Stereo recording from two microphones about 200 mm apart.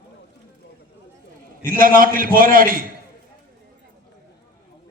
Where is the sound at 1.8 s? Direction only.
45° right (ahead or behind).